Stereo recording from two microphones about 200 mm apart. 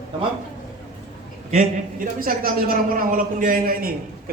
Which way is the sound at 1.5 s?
40° right (ahead or behind).